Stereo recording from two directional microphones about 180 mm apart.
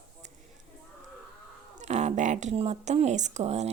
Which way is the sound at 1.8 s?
40° right (ahead or behind).